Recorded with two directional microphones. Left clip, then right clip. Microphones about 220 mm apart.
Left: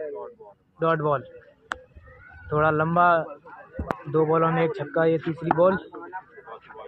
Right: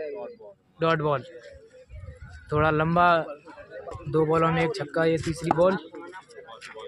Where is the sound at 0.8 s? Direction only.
15° right (ahead or behind).